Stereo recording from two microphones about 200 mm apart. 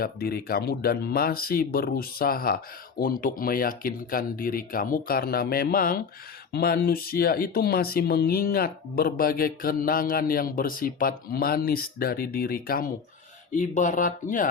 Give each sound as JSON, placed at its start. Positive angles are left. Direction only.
{"t": 0.0, "sound": "speech", "side_deg": 50}